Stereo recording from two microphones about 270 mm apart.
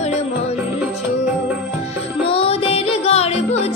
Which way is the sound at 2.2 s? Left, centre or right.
Left.